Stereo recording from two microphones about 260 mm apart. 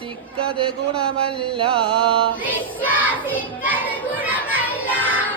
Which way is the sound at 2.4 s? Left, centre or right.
Centre.